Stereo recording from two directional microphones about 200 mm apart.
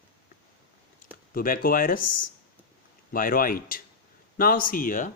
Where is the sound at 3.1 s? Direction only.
45° left (ahead or behind).